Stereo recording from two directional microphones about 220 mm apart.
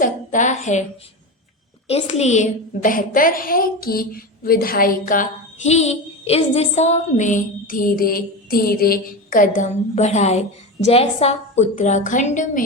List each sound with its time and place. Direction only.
0.0 s a woman's voice: 35° left (ahead or behind)
1.9 s a woman's voice: 30° left (ahead or behind)